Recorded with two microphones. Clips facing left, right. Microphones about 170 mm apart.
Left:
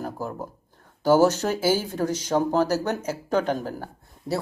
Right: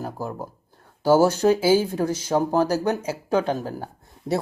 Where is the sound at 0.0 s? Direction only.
10° right (ahead or behind).